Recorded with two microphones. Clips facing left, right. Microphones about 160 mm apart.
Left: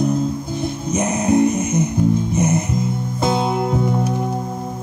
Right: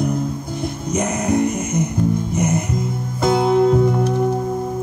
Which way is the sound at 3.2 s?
20° left (ahead or behind).